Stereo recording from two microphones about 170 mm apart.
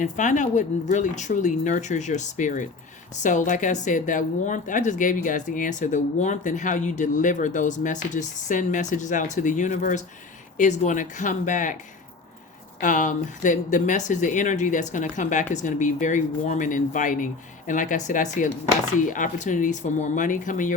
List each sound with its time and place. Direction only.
0.0 s speech: 45° left (ahead or behind)
12.8 s speech: 50° left (ahead or behind)